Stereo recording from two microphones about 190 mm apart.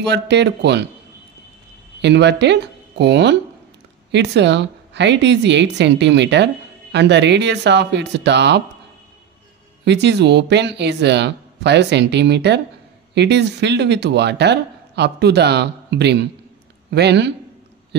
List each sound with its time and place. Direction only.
0.0 s speech: 65° right (ahead or behind)
2.0 s a woman's voice: 65° right (ahead or behind)
9.8 s speech: 65° right (ahead or behind)